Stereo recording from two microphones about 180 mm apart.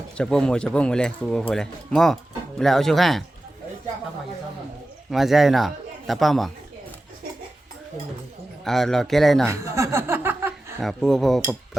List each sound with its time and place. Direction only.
0.2 s speech: 5° left (ahead or behind)
5.1 s speech: centre (ahead or behind)
8.6 s speech: centre (ahead or behind)
9.5 s chuckle: 15° right (ahead or behind)
10.8 s speech: centre (ahead or behind)